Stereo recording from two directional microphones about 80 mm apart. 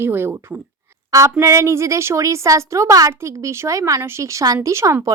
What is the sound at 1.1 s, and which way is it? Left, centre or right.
A woman's voice, right.